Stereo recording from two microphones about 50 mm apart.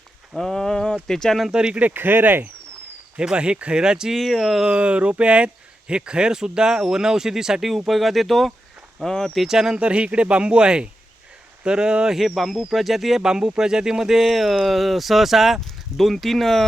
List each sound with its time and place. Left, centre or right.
0.3 s speech: centre
1.5 s speech: centre
1.8 s speech: right
3.2 s speech: right
4.2 s speech: centre
4.6 s speech: right; by 9.4 s centre
9.4 s speech: centre
9.7 s speech: right
12.1 s speech: centre